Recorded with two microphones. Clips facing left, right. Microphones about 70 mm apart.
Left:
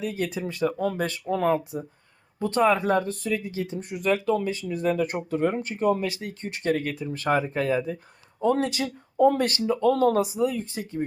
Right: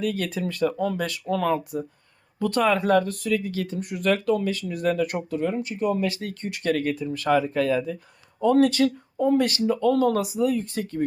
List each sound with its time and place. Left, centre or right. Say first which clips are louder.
0.0 s speech: right 2 dB; left
0.8 s speech: even; left; by 4.2 s centre
4.7 s speech: even; left
5.3 s speech: left 1 dB; left
6.1 s speech: right 2 dB; left
9.1 s speech: left 3 dB; left
9.4 s speech: right 1 dB; left